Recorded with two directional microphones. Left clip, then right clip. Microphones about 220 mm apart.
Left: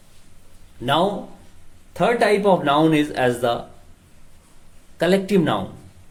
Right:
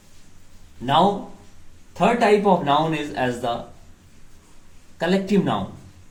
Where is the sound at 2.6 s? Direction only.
35° left (ahead or behind).